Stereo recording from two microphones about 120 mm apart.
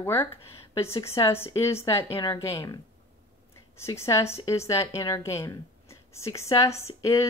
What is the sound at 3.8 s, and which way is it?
Speech, 25° left (ahead or behind).